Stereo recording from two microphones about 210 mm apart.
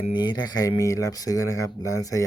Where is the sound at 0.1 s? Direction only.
20° left (ahead or behind).